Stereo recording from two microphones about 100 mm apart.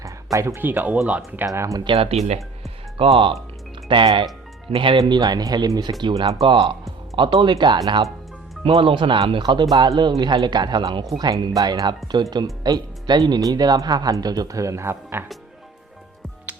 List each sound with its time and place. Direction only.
0.0 s speech: 30° right (ahead or behind); by 1.5 s 15° right (ahead or behind)
1.5 s speech: 30° right (ahead or behind)
1.8 s speech: 65° right (ahead or behind)
4.9 s speech: 45° right (ahead or behind)
6.4 s speech: 60° right (ahead or behind)
8.6 s speech: 65° right (ahead or behind)
9.4 s speech: 50° right (ahead or behind); by 15.2 s 25° right (ahead or behind)